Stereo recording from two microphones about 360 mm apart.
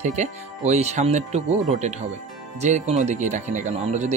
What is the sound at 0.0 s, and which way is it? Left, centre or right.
Speech, centre.